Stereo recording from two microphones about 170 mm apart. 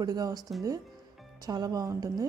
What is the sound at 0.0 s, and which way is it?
A woman's voice, 20° right (ahead or behind).